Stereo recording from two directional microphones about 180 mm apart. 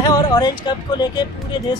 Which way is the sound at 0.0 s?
20° left (ahead or behind).